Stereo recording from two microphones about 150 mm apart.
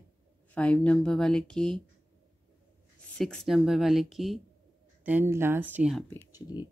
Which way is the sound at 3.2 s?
5° left (ahead or behind).